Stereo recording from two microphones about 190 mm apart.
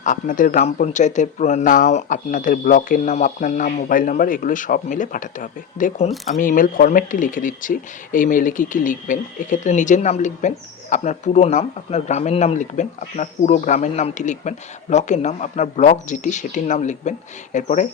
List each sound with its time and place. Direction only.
0.0 s speech: 45° left (ahead or behind)